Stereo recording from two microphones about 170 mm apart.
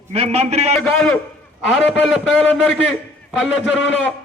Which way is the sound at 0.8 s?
5° left (ahead or behind).